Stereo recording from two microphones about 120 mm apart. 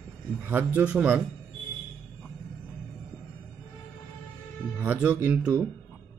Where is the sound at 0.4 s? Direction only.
15° right (ahead or behind).